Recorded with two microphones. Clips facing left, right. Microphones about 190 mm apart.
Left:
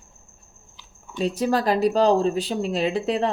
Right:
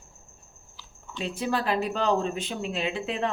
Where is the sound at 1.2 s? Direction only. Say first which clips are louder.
Left 6 dB; 40° left (ahead or behind).